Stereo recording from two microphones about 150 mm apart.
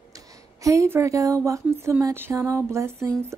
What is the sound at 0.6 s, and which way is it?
A woman's voice, 20° right (ahead or behind).